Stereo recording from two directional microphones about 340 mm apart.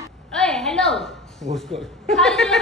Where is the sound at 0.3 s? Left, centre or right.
Centre.